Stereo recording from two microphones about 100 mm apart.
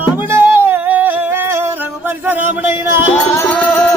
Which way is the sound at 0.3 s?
25° right (ahead or behind).